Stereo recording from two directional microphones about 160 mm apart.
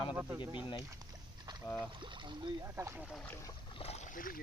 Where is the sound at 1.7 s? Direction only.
30° right (ahead or behind).